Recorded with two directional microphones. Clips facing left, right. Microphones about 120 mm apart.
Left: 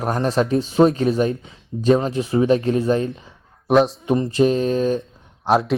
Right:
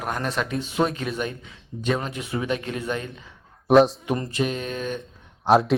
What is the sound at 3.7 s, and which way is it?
Speech, centre (ahead or behind).